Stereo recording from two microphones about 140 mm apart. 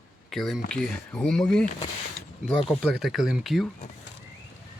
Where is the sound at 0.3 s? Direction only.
Centre (ahead or behind).